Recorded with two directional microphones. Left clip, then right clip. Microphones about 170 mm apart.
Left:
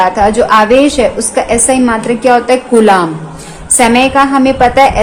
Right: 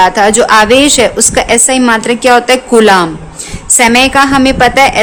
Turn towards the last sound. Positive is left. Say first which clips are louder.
# even
turn(degrees=-45)  # may be behind; listen again after turning